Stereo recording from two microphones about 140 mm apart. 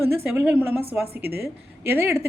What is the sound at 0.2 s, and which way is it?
A woman's voice, 15° right (ahead or behind).